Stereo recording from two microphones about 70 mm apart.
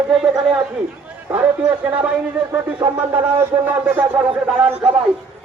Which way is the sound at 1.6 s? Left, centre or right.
Centre.